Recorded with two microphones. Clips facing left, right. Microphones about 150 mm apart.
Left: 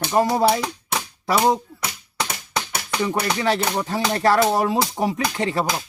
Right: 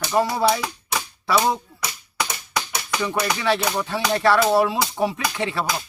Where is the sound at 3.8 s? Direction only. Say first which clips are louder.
Even; 40° left (ahead or behind).